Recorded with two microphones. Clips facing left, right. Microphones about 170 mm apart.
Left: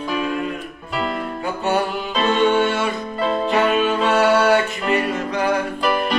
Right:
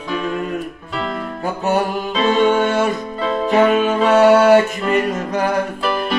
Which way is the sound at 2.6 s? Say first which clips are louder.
Right 4 dB; 45° right (ahead or behind).